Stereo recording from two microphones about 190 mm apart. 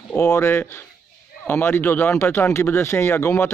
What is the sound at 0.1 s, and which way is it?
Speech, 10° left (ahead or behind).